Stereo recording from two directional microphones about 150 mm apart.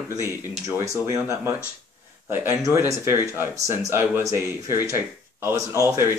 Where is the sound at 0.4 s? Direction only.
20° right (ahead or behind).